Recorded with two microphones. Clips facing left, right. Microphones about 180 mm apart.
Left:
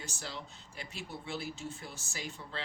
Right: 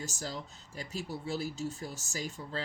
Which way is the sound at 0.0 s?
40° right (ahead or behind).